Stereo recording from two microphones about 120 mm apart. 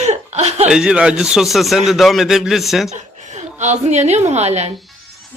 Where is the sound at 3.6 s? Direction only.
70° right (ahead or behind).